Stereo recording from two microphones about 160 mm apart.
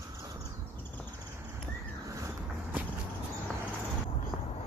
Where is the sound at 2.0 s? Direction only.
20° right (ahead or behind).